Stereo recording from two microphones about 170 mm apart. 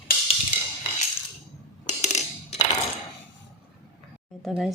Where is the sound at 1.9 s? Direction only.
45° left (ahead or behind).